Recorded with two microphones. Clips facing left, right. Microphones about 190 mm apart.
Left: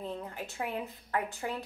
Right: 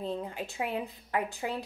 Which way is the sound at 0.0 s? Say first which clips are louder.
Right 4 dB; 15° right (ahead or behind).